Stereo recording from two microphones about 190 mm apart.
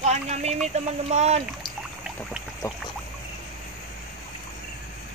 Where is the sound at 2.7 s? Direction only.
15° left (ahead or behind).